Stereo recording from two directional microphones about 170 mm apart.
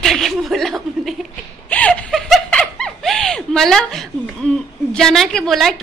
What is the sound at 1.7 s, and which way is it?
Snicker, 10° left (ahead or behind).